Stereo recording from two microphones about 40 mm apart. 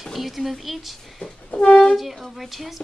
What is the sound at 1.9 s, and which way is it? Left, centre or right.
Speech, centre.